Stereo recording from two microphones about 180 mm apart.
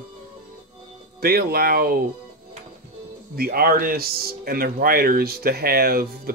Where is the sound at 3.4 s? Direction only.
55° right (ahead or behind).